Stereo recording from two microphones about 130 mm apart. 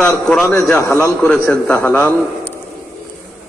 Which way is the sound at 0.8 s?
25° left (ahead or behind).